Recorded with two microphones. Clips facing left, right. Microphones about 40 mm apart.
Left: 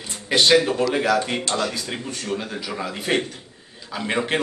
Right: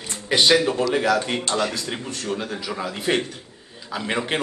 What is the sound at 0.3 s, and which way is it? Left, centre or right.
A man's voice, centre.